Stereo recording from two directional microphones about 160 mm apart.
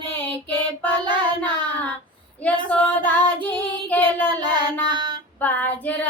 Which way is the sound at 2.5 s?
10° left (ahead or behind).